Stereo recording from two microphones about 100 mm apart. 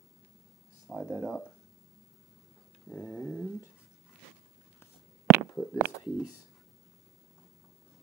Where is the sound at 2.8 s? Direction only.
15° left (ahead or behind).